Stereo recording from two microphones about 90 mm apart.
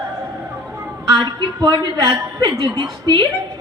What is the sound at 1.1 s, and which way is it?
A woman's voice, 55° right (ahead or behind).